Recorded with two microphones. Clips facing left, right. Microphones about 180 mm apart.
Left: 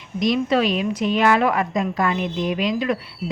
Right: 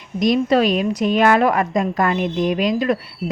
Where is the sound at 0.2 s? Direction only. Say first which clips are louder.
Right 3 dB; 45° right (ahead or behind).